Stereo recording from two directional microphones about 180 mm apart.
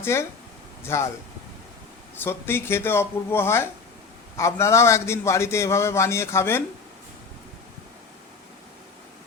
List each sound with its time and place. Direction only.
0.0 s a man's voice: 15° left (ahead or behind)
2.1 s a man's voice: 10° left (ahead or behind)